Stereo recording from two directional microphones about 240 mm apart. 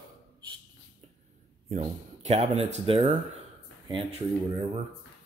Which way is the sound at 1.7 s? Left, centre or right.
Right.